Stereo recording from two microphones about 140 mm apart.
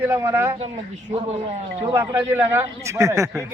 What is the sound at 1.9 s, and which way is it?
A man's voice, 20° right (ahead or behind).